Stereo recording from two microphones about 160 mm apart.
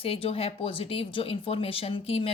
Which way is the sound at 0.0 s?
35° left (ahead or behind).